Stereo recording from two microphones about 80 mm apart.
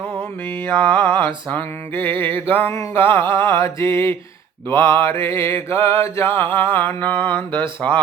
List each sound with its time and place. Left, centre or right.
0.6 s mantra: left